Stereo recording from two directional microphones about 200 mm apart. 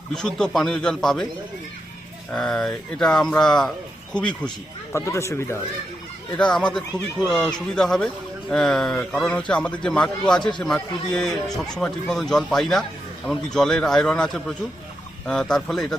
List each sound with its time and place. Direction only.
0.1 s speech: 5° left (ahead or behind)
2.3 s speech: centre (ahead or behind)